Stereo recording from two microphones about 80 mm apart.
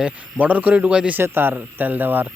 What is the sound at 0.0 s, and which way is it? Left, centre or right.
Speech, centre.